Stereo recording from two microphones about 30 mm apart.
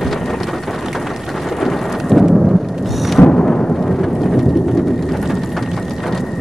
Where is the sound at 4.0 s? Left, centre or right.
Centre.